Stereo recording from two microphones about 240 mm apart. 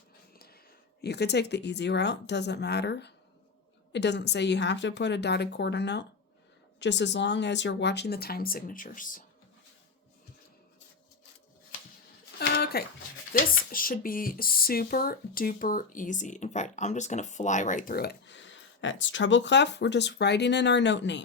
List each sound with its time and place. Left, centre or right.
1.0 s speech: left
12.4 s a sound: left
13.3 s speech: left